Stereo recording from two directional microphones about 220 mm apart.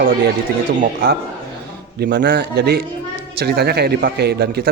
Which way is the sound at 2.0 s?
55° right (ahead or behind).